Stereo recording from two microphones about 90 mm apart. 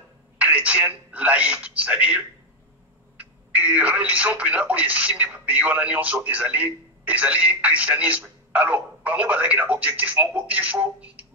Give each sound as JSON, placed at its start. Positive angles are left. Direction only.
{"t": 0.4, "sound": "speech", "side_deg": -15}